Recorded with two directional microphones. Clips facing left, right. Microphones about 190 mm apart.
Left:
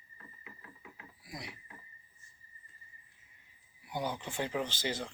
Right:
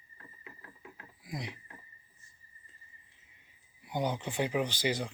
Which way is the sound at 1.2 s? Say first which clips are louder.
Right 5 dB; 20° right (ahead or behind).